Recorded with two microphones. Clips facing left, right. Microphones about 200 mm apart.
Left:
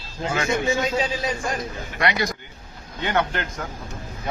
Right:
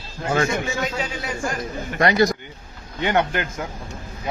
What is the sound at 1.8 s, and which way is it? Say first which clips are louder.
Speech: right 8 dB; 45° right (ahead or behind).